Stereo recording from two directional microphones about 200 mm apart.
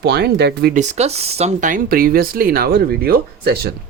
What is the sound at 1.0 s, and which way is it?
Speech, 30° right (ahead or behind).